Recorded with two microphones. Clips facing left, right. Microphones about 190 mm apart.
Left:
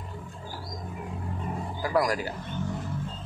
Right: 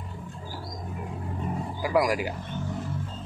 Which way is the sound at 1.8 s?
10° right (ahead or behind).